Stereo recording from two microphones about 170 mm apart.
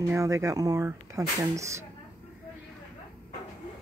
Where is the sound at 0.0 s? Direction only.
20° right (ahead or behind).